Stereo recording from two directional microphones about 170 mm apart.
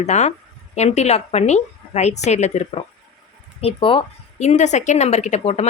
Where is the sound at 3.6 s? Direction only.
30° left (ahead or behind).